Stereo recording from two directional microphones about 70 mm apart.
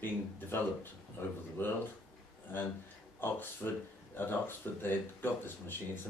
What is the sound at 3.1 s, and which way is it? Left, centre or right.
Speech, left.